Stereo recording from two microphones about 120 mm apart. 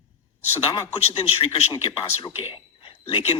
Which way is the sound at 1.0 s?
55° left (ahead or behind).